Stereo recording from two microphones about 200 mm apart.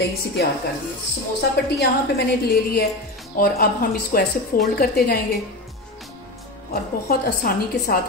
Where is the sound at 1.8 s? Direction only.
55° left (ahead or behind).